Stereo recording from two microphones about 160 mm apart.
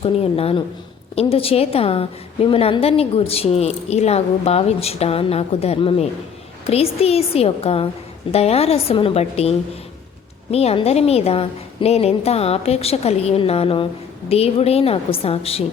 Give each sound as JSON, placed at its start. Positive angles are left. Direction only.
{"t": 0.0, "sound": "a woman's voice", "side_deg": 40}